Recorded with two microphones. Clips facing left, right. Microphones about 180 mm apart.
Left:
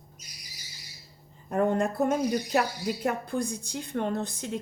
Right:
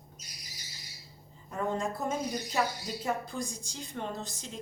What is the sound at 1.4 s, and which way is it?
Speech, 60° left (ahead or behind).